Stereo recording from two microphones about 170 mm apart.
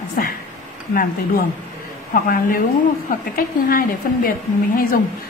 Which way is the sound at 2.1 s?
55° left (ahead or behind).